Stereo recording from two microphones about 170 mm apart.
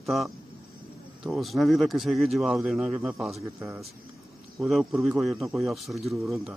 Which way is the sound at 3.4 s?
15° right (ahead or behind).